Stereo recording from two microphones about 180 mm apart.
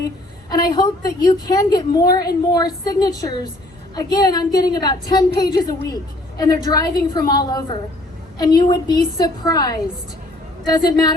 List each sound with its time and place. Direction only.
0.5 s a woman's voice: 20° left (ahead or behind)